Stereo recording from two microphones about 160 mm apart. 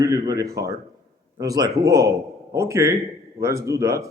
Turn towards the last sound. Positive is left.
turn(degrees=-20)  # may be behind; listen again after turning